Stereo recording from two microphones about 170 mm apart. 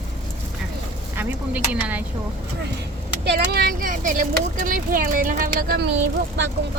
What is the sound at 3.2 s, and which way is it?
Speech, 70° right (ahead or behind).